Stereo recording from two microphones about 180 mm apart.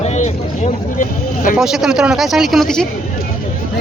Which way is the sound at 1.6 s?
5° right (ahead or behind).